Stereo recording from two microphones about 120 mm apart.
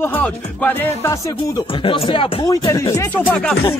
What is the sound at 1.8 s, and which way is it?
Speech, 45° left (ahead or behind).